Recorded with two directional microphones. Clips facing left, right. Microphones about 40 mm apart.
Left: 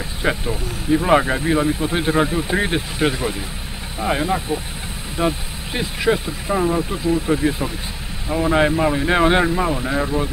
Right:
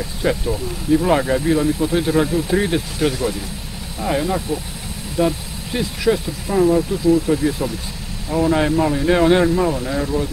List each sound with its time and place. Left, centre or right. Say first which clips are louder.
0.2 s speech: right 2 dB; left